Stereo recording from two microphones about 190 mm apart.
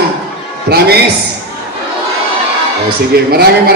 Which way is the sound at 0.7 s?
55° right (ahead or behind).